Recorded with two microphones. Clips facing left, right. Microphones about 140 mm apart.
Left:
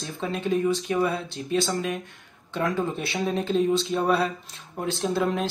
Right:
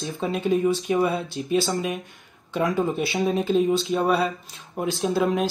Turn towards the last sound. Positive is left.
turn(degrees=-5)  # may be behind; listen again after turning